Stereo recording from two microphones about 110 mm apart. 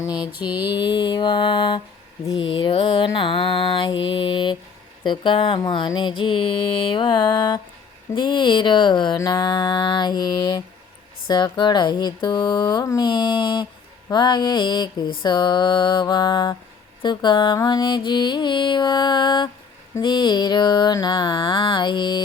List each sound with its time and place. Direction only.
0.3 s mantra: 50° left (ahead or behind)
13.1 s mantra: 45° left (ahead or behind)